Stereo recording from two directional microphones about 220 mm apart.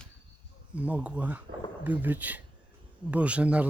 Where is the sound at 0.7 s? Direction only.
5° right (ahead or behind).